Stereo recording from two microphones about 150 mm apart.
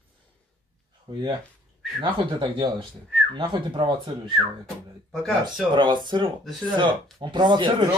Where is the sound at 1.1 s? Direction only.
30° right (ahead or behind).